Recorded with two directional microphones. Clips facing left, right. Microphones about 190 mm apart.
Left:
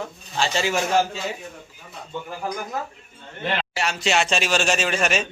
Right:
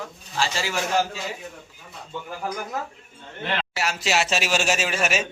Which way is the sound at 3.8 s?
5° right (ahead or behind).